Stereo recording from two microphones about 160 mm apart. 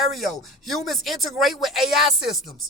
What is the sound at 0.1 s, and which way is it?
Speech, centre (ahead or behind).